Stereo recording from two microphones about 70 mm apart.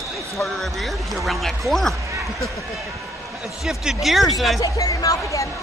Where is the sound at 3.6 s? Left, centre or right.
Centre.